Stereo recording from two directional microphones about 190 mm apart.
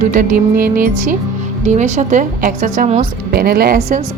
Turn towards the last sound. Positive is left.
turn(degrees=-55)  # may be behind; listen again after turning